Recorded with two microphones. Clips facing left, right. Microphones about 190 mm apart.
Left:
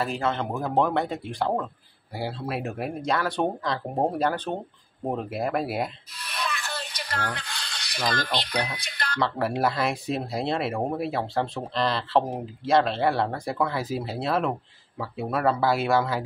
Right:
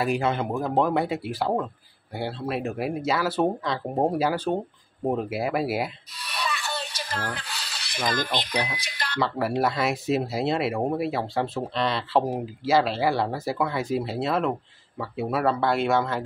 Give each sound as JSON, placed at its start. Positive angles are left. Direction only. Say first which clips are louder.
{"t": 0.0, "sound": "speech", "louder": "right 2 dB", "side_deg": -15}
{"t": 0.5, "sound": "speech", "louder": "even", "side_deg": 0}